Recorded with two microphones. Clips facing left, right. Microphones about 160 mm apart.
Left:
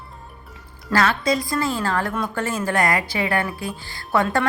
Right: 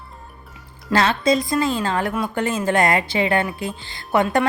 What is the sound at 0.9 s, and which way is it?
A woman's voice, 25° right (ahead or behind).